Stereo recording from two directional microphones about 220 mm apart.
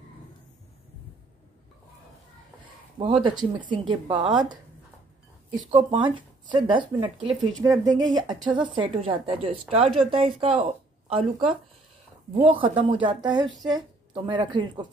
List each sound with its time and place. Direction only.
3.1 s speech: centre (ahead or behind)
3.3 s a woman's voice: 20° right (ahead or behind)
5.7 s a woman's voice: 25° right (ahead or behind)
7.2 s speech: centre (ahead or behind)
7.6 s a woman's voice: 15° right (ahead or behind)